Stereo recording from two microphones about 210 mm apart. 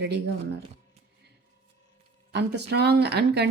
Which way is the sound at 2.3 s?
55° right (ahead or behind).